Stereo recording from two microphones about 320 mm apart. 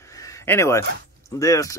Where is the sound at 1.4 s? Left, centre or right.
Centre.